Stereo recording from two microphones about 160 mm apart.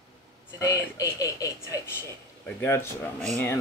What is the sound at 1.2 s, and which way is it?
Television, 20° left (ahead or behind).